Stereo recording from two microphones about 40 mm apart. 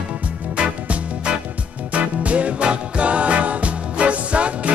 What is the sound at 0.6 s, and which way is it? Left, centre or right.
Music, right.